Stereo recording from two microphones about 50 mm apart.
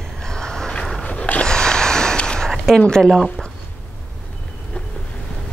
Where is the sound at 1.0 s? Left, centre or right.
Left.